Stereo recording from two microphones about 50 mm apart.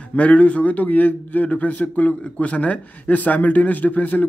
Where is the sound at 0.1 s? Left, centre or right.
Left.